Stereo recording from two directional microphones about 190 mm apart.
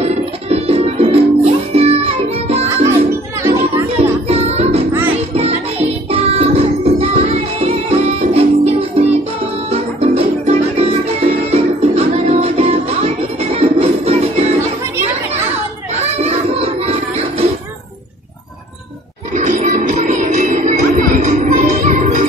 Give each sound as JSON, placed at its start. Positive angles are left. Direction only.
{"t": 0.5, "sound": "music", "side_deg": -30}
{"t": 3.9, "sound": "music", "side_deg": -35}
{"t": 15.9, "sound": "music", "side_deg": -35}
{"t": 19.3, "sound": "music", "side_deg": -40}